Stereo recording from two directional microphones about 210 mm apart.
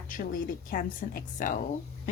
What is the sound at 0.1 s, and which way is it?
Speech, 40° left (ahead or behind).